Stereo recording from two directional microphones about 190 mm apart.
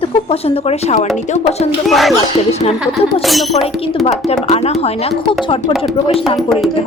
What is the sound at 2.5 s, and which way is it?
Speech, 35° left (ahead or behind).